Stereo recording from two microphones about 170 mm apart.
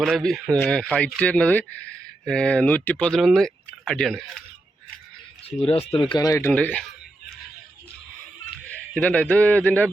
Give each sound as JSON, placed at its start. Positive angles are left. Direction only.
{"t": 0.0, "sound": "speech", "side_deg": 0}
{"t": 5.5, "sound": "a man's voice", "side_deg": 35}
{"t": 9.0, "sound": "a man's voice", "side_deg": 10}